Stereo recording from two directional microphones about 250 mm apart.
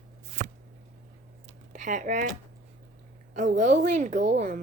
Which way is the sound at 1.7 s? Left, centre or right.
Right.